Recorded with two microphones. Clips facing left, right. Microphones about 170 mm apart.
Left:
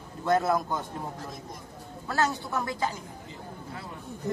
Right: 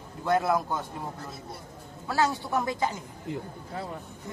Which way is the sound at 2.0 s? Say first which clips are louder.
Right 1 dB; 10° right (ahead or behind).